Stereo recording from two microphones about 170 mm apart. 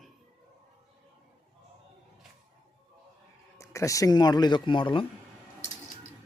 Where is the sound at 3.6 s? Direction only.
15° left (ahead or behind).